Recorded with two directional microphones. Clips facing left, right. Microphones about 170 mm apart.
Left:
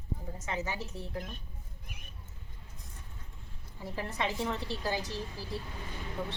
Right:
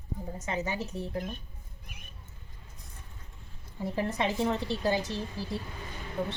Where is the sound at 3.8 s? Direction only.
20° right (ahead or behind).